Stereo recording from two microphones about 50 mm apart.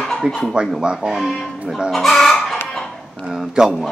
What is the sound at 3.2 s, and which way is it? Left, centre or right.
Speech, centre.